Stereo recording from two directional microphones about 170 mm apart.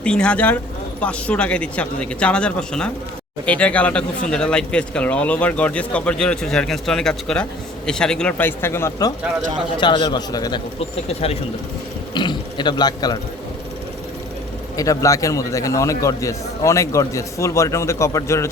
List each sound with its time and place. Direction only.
0.0 s a man's voice: 5° left (ahead or behind); by 10.6 s 25° left (ahead or behind)
10.8 s a man's voice: 35° left (ahead or behind)
14.8 s a man's voice: 20° left (ahead or behind)